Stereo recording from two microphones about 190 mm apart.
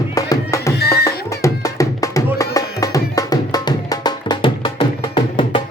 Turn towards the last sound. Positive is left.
turn(degrees=30)  # may be behind; listen again after turning